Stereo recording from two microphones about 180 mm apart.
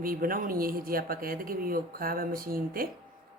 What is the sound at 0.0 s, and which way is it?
Speech, 50° right (ahead or behind).